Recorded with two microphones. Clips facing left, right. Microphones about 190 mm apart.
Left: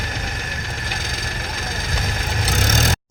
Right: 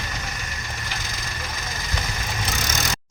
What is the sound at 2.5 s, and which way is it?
Vehicle, 50° left (ahead or behind).